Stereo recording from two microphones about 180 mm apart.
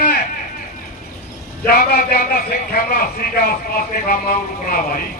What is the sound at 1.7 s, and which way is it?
A man's voice, 55° left (ahead or behind).